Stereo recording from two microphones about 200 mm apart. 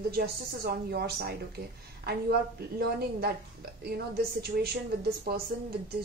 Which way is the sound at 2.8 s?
50° right (ahead or behind).